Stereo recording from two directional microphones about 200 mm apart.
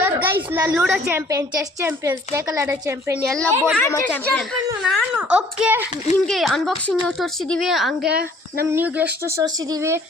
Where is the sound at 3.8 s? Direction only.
10° left (ahead or behind); by 10.0 s 15° right (ahead or behind).